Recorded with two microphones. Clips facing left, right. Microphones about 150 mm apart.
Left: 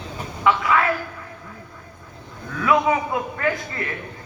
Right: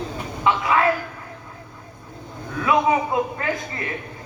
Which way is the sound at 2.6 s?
25° right (ahead or behind).